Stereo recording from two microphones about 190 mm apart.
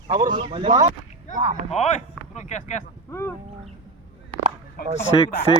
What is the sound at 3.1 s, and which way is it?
Speech, 15° left (ahead or behind).